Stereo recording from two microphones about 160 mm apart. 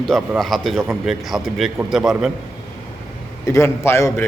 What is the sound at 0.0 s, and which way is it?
A man's voice, centre (ahead or behind).